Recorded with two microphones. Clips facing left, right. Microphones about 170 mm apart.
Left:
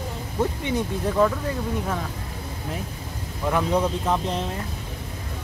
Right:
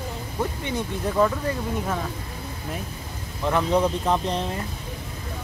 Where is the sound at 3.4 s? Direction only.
5° left (ahead or behind).